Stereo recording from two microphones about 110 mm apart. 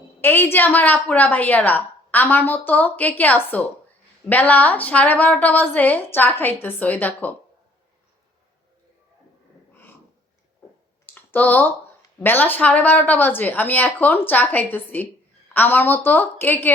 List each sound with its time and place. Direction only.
0.2 s a woman's voice: 20° left (ahead or behind)
11.0 s a sound: 15° left (ahead or behind)
12.2 s a woman's voice: 15° left (ahead or behind)